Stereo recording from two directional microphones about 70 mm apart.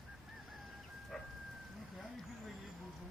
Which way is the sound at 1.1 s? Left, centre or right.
Centre.